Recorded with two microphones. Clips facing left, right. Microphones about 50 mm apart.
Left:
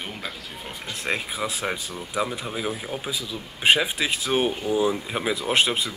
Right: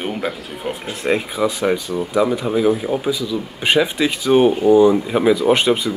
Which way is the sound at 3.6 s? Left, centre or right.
Centre.